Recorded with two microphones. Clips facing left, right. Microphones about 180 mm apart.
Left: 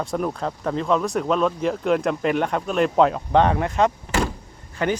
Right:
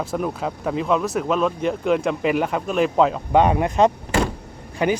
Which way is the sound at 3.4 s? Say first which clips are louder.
Right 3 dB; 15° right (ahead or behind).